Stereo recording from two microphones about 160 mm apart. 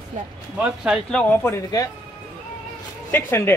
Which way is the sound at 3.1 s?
15° left (ahead or behind).